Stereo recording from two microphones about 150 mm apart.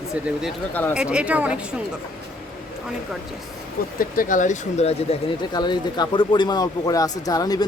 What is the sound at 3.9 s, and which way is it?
Speech, 65° left (ahead or behind).